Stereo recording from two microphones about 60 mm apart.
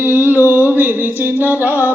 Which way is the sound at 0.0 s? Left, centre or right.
Right.